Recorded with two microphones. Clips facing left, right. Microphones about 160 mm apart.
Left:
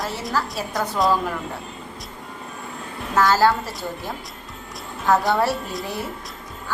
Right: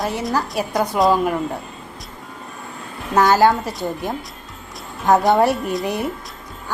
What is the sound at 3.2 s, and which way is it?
Speech, 20° right (ahead or behind).